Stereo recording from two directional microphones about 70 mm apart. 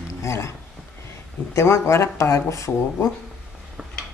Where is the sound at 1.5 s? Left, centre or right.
Left.